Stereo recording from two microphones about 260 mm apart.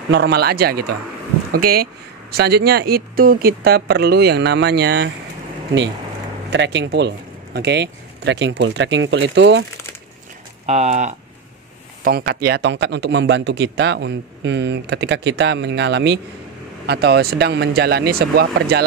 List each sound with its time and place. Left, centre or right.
0.1 s speech: right
6.5 s speech: right
10.7 s speech: right